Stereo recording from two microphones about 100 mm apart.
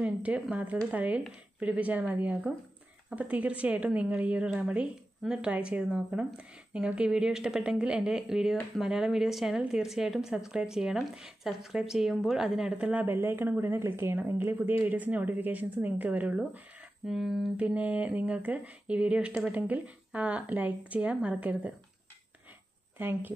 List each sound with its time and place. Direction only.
0.0 s speech: 15° right (ahead or behind)
17.0 s speech: 5° right (ahead or behind)
17.6 s speech: 15° right (ahead or behind)
22.9 s speech: 20° right (ahead or behind)